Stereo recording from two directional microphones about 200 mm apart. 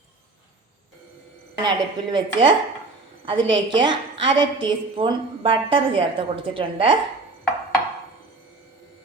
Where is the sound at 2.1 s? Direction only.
25° right (ahead or behind).